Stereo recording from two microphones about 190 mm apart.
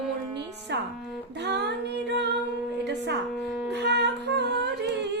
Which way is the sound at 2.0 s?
65° right (ahead or behind).